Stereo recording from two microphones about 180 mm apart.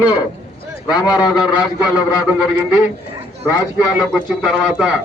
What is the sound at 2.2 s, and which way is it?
Speech, 5° right (ahead or behind).